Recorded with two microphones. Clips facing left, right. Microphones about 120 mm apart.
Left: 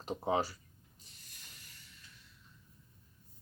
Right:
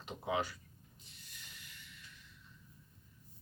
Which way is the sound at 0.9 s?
45° left (ahead or behind).